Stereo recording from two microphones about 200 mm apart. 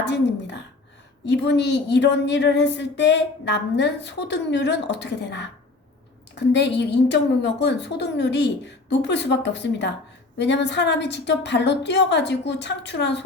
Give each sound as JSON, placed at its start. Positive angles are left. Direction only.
{"t": 0.1, "sound": "a woman's voice", "side_deg": 60}